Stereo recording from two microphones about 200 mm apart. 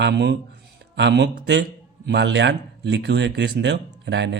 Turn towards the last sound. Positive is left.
turn(degrees=-60)  # may be behind; listen again after turning